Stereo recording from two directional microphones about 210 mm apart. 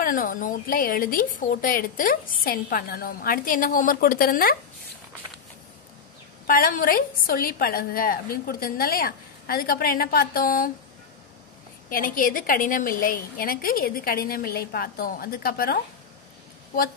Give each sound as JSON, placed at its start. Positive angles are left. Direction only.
{"t": 0.0, "sound": "a woman's voice", "side_deg": 40}
{"t": 6.4, "sound": "a woman's voice", "side_deg": 45}
{"t": 11.9, "sound": "a woman's voice", "side_deg": 40}